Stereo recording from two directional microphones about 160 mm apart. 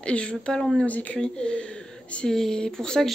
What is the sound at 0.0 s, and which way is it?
Speech, 5° left (ahead or behind).